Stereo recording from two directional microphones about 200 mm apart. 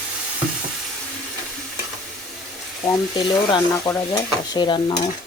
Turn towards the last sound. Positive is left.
turn(degrees=20)  # may be behind; listen again after turning